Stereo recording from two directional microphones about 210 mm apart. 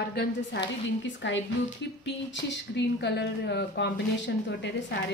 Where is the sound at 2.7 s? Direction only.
55° left (ahead or behind).